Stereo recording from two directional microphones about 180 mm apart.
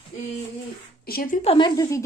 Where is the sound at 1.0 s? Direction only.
55° left (ahead or behind).